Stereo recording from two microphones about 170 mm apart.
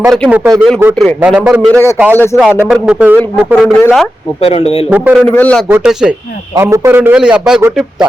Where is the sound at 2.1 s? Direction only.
15° left (ahead or behind).